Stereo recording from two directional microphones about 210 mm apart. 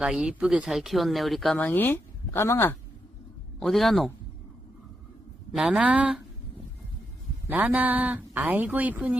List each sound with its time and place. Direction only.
0.0 s speech: 5° right (ahead or behind)
3.6 s speech: centre (ahead or behind)
5.5 s speech: 5° right (ahead or behind)
7.4 s speech: 10° right (ahead or behind)